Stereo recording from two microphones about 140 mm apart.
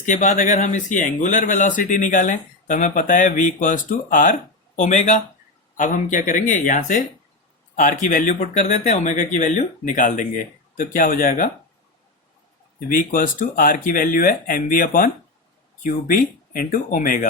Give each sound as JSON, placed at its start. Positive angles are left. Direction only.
{"t": 0.0, "sound": "speech", "side_deg": 60}
{"t": 12.9, "sound": "speech", "side_deg": 75}